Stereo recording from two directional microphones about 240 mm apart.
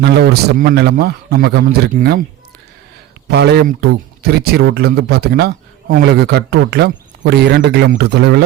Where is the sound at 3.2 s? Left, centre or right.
Right.